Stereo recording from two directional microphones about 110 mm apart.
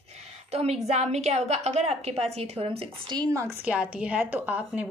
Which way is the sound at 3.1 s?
35° right (ahead or behind).